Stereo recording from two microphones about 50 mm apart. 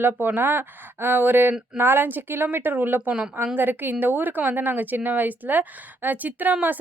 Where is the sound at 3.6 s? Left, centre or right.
Right.